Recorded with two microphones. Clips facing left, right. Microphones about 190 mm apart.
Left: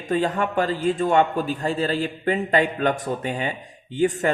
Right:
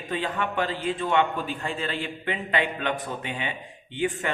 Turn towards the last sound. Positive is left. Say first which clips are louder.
# left 6 dB
turn(degrees=40)  # may be behind; listen again after turning